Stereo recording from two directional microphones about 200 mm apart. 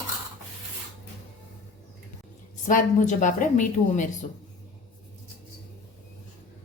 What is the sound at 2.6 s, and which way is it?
A woman's voice, 40° left (ahead or behind).